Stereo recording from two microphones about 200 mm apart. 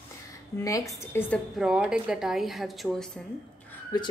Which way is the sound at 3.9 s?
20° left (ahead or behind).